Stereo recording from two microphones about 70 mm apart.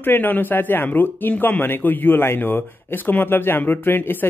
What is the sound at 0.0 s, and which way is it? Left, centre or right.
Speech, left.